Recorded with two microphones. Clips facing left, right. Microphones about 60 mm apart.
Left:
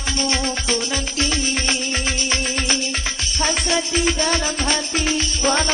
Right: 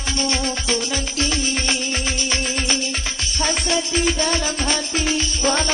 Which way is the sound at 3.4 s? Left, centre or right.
Left.